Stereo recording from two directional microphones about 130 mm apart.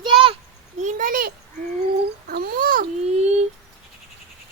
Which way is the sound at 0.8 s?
80° right.